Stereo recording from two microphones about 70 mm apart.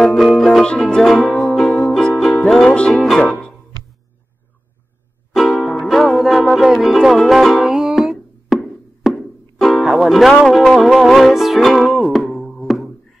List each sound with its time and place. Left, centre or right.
0.0 s music: centre
2.9 s music: centre
5.3 s music: centre
7.7 s a sound: centre
9.0 s music: centre